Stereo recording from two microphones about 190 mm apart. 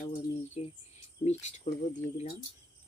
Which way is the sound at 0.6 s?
35° left (ahead or behind).